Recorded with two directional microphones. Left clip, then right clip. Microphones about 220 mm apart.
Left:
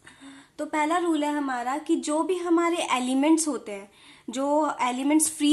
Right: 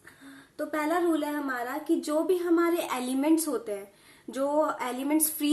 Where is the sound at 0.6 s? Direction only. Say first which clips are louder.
Left 3 dB; 40° left (ahead or behind).